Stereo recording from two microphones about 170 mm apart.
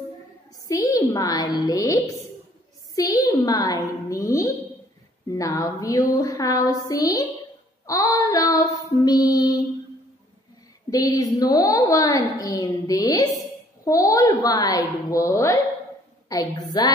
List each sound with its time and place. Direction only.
0.7 s a woman's voice: 20° left (ahead or behind)
3.0 s a woman's voice: 20° left (ahead or behind)
7.8 s child singing: 20° left (ahead or behind)
10.9 s a woman's voice: 20° left (ahead or behind)